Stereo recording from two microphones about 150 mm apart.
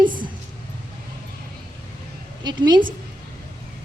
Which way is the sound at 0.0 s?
30° right (ahead or behind).